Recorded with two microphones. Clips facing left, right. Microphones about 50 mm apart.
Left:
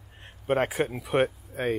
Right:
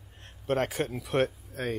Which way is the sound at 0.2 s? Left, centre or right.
Centre.